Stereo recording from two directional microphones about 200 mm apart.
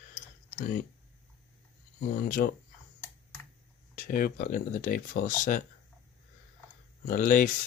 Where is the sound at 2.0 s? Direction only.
50° left (ahead or behind).